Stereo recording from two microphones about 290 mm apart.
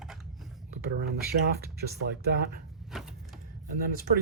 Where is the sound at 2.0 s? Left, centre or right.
Right.